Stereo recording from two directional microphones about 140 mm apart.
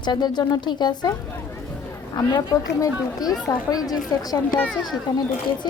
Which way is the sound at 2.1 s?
30° left (ahead or behind).